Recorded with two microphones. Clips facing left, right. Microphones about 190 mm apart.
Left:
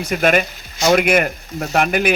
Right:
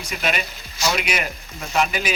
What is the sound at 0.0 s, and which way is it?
Speech, 55° left (ahead or behind).